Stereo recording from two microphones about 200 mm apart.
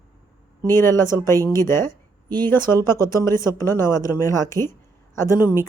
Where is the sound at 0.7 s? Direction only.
10° left (ahead or behind).